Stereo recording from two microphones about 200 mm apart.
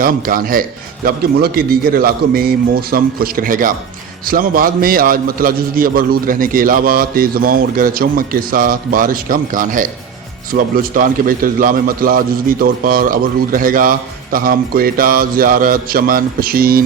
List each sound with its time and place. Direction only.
0.0 s a man's voice: 45° right (ahead or behind)